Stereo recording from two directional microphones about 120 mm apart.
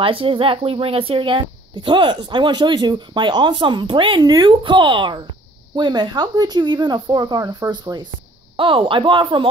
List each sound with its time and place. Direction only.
0.0 s speech: 50° right (ahead or behind)